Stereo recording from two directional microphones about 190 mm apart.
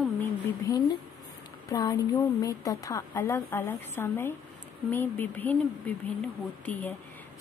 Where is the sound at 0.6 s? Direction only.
20° left (ahead or behind).